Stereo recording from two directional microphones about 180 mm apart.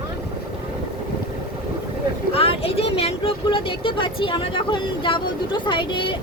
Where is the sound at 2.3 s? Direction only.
30° left (ahead or behind).